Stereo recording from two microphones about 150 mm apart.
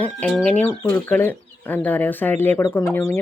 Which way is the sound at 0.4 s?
10° left (ahead or behind).